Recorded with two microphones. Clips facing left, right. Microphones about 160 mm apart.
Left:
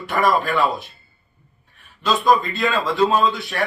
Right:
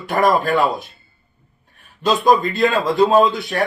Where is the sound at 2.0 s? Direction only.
40° right (ahead or behind).